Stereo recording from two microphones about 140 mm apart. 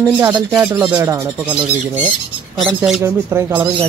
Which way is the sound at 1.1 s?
30° right (ahead or behind).